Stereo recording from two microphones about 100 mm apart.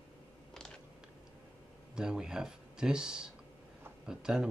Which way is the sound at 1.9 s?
5° right (ahead or behind).